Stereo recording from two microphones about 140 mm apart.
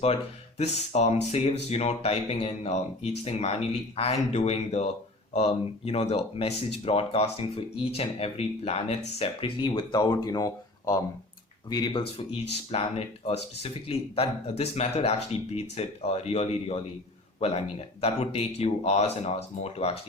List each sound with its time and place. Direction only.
0.6 s speech: 50° left (ahead or behind)